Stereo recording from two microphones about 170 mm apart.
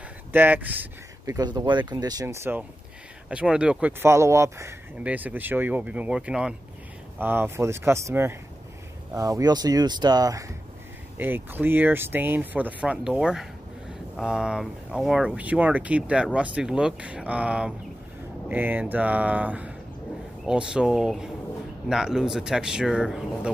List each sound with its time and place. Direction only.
0.3 s speech: 10° right (ahead or behind)